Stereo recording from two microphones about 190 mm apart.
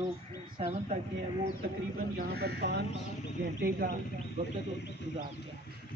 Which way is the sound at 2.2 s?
55° right (ahead or behind).